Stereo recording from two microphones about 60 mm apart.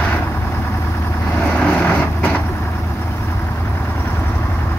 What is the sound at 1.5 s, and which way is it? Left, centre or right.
Vehicle, centre.